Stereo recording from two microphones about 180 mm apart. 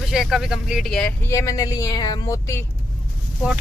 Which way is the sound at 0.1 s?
5° right (ahead or behind).